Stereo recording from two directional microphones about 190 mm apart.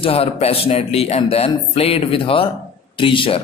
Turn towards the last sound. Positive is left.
turn(degrees=25)  # may be behind; listen again after turning